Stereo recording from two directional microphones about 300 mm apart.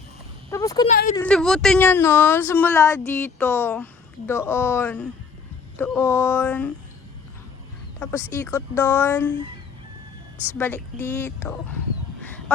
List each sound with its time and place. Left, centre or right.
0.5 s speech: centre
0.9 s a woman's voice: left
1.1 s speech: centre
7.9 s speech: centre
10.6 s speech: centre